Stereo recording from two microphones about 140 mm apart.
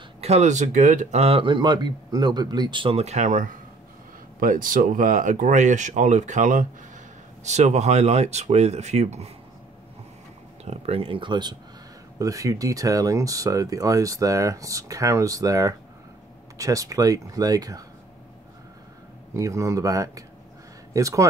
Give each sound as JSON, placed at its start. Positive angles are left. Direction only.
{"t": 0.2, "sound": "speech", "side_deg": -55}
{"t": 4.4, "sound": "speech", "side_deg": -85}
{"t": 10.6, "sound": "speech", "side_deg": -45}
{"t": 19.3, "sound": "speech", "side_deg": -20}